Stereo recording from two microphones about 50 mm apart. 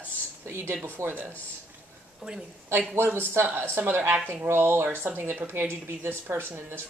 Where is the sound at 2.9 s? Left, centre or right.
Right.